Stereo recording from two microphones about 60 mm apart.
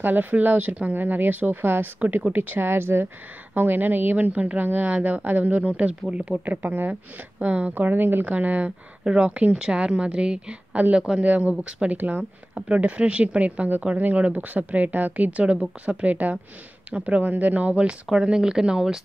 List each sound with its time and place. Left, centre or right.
0.0 s a woman's voice: right; by 6.4 s centre
6.4 s a woman's voice: right; by 18.9 s centre